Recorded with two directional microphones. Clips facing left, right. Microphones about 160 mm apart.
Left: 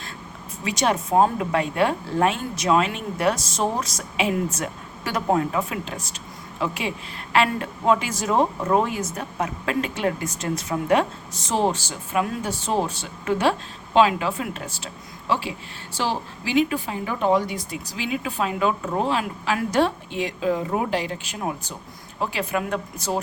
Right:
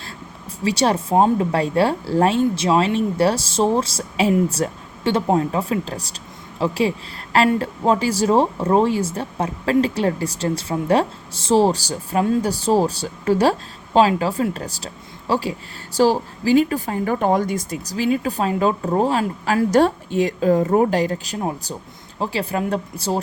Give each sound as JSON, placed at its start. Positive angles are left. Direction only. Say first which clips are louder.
{"t": 0.6, "sound": "speech", "louder": "right 4 dB", "side_deg": -30}